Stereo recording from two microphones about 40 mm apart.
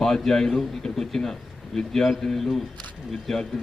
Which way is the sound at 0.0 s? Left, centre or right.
Centre.